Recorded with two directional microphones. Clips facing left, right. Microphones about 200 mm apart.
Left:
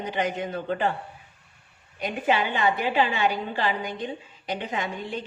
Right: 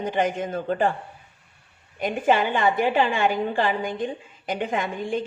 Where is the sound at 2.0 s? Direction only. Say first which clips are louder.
Right 4 dB; 50° right (ahead or behind).